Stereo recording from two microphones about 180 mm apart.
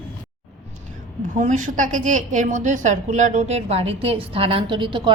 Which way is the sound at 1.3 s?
45° right (ahead or behind).